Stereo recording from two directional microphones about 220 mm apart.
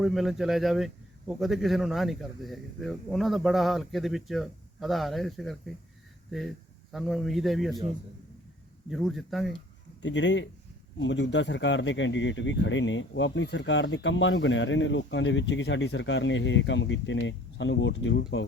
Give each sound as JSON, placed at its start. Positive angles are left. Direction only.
{"t": 0.0, "sound": "speech", "side_deg": 0}
{"t": 6.9, "sound": "speech", "side_deg": 0}
{"t": 8.9, "sound": "speech", "side_deg": 0}
{"t": 10.0, "sound": "speech", "side_deg": 55}